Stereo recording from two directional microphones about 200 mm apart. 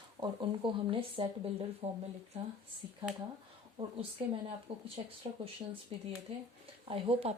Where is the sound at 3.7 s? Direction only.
25° right (ahead or behind).